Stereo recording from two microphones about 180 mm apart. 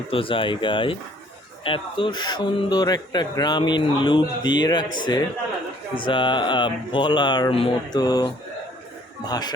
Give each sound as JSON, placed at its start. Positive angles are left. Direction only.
{"t": 0.1, "sound": "a man's voice", "side_deg": 30}